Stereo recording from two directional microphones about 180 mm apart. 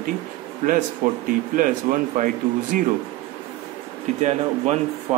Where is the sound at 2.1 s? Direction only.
45° right (ahead or behind).